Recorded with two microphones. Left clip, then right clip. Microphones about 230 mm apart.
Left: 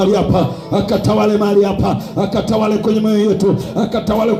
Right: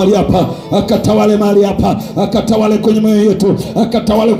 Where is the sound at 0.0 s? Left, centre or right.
Right.